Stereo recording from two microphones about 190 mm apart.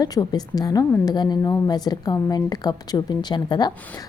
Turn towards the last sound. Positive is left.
turn(degrees=20)  # may be behind; listen again after turning